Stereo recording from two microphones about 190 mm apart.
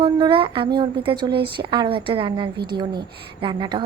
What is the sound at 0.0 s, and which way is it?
A woman's voice, 25° right (ahead or behind).